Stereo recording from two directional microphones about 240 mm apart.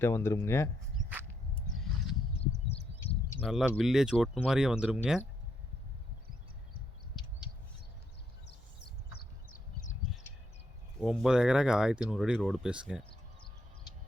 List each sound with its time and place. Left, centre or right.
0.0 s speech: centre
1.7 s a sound: centre
3.4 s speech: centre
11.0 s speech: centre